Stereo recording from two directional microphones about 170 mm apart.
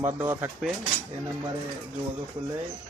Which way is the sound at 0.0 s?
10° right (ahead or behind).